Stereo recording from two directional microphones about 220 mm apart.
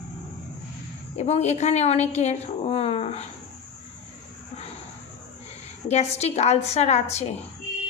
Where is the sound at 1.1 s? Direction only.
30° left (ahead or behind).